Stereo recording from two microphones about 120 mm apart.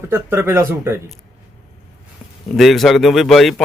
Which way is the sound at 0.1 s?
20° right (ahead or behind).